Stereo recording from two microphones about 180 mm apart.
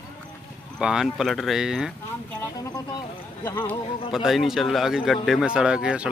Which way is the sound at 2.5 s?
20° left (ahead or behind).